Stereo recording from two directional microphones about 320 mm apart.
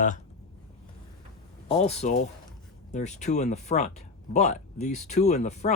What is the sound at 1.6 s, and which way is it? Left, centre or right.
Speech, centre.